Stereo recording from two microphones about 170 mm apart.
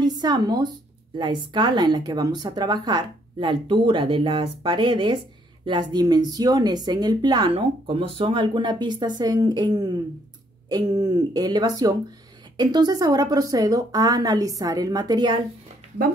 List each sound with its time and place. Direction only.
0.0 s speech: 25° right (ahead or behind)